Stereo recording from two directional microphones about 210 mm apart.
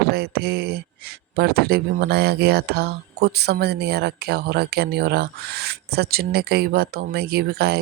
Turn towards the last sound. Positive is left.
turn(degrees=-50)  # may be behind; listen again after turning